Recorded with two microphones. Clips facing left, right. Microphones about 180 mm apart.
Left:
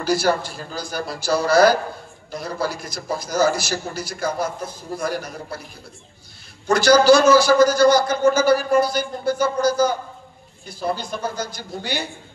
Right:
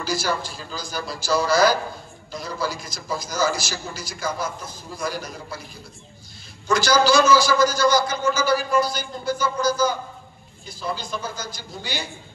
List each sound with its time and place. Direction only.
0.0 s a man's voice: 60° left (ahead or behind)
6.7 s a man's voice: 60° left (ahead or behind)